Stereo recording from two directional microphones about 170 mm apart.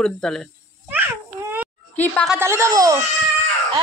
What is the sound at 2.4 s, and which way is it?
Speech, 15° right (ahead or behind).